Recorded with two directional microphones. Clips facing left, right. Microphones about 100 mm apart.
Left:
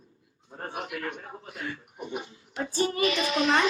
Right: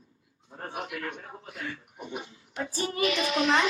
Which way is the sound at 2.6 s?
30° left (ahead or behind).